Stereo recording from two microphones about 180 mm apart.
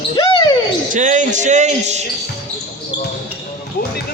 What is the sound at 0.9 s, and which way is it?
Speech, 45° right (ahead or behind).